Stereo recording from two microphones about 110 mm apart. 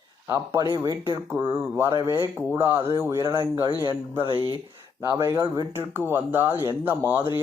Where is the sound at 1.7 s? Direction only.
25° right (ahead or behind).